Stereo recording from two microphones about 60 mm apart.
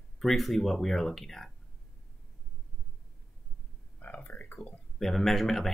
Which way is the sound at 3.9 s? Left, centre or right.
Left.